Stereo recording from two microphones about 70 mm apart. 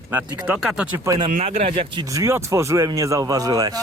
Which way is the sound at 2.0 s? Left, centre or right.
Right.